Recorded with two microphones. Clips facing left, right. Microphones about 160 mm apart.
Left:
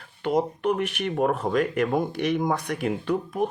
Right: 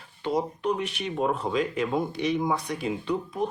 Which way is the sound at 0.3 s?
60° left (ahead or behind).